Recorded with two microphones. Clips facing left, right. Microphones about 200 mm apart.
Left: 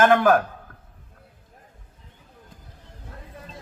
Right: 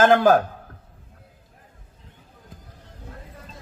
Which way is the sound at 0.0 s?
30° right (ahead or behind).